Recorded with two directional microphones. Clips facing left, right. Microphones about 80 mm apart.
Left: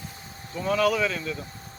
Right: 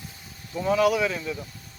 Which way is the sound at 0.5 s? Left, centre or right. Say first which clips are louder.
Right 2 dB; centre.